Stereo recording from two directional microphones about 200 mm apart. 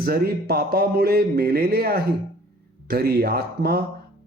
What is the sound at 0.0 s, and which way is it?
Speech, 50° right (ahead or behind).